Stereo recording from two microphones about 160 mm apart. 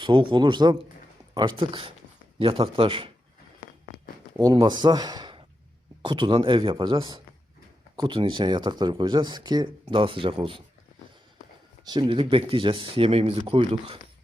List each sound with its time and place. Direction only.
0.0 s speech: 30° right (ahead or behind)
4.4 s speech: 25° right (ahead or behind)
11.9 s speech: 30° right (ahead or behind)